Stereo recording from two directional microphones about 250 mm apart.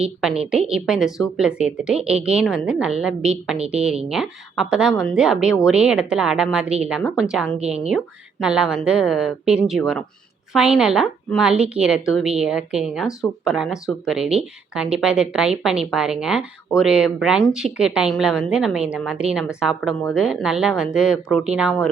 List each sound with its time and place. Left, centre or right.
0.0 s a woman's voice: centre